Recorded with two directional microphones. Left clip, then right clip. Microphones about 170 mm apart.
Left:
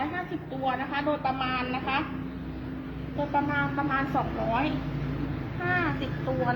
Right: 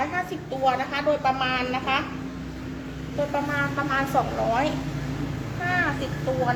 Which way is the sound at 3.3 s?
15° right (ahead or behind).